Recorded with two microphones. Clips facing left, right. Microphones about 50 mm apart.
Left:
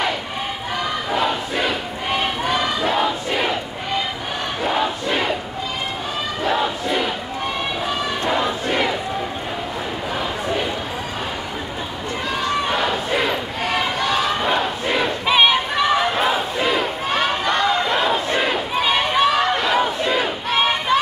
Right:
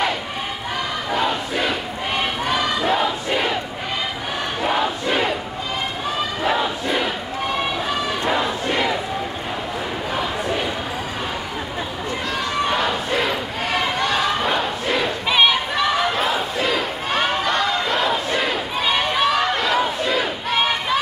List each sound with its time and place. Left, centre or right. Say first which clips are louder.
1.1 s crowd: even; centre
4.7 s crowd: even; centre
12.6 s a sound: even; centre
17.1 s a sound: even; centre
18.8 s run: left 2 dB; centre
20.4 s battle cry: left 3 dB; centre